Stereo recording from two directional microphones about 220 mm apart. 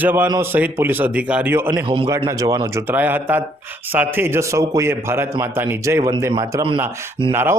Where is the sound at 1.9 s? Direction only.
20° right (ahead or behind).